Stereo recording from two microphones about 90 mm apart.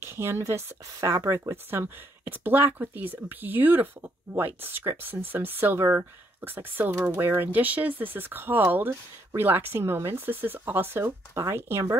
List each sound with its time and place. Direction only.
0.0 s speech: 30° right (ahead or behind)